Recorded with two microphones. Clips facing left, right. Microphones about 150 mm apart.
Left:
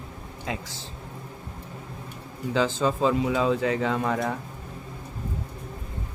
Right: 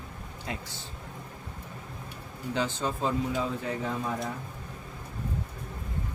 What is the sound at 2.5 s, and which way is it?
Speech, 90° left.